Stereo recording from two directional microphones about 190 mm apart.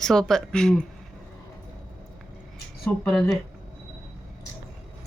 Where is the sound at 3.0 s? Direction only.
10° left (ahead or behind).